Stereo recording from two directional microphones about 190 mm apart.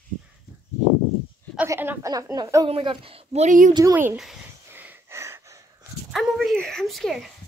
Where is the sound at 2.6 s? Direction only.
30° right (ahead or behind).